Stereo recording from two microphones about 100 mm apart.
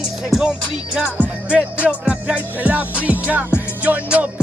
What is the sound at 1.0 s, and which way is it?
Music, 15° right (ahead or behind).